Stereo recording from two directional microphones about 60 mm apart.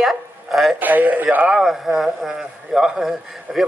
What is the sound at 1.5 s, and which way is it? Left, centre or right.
A man's voice, centre.